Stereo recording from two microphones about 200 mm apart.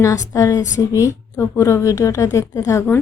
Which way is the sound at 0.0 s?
15° left (ahead or behind).